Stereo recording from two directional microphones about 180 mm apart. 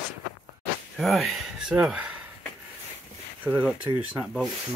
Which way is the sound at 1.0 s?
Centre (ahead or behind).